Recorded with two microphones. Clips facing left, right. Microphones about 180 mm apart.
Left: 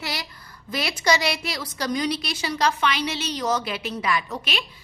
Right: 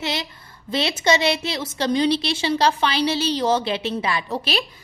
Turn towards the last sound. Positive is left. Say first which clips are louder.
# right 4 dB
turn(degrees=-35)  # may be behind; listen again after turning